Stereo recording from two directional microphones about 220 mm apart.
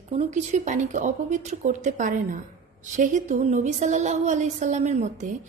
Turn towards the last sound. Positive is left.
turn(degrees=-35)  # may be behind; listen again after turning